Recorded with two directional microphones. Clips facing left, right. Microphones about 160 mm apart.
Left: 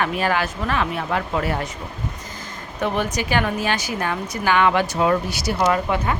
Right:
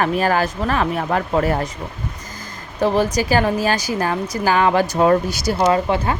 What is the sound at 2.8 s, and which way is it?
Speech, 35° right (ahead or behind).